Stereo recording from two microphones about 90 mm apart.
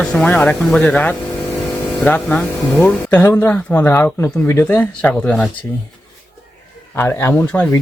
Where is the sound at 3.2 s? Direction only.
30° left (ahead or behind).